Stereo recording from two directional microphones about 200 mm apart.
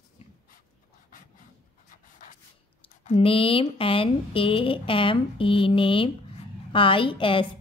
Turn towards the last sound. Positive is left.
turn(degrees=25)  # may be behind; listen again after turning